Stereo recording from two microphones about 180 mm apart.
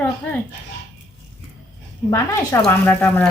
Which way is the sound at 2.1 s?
15° left (ahead or behind).